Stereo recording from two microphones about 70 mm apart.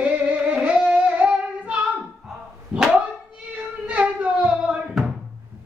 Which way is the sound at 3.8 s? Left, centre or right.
Centre.